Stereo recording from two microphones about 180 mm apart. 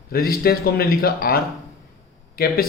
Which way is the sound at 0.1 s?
55° left (ahead or behind).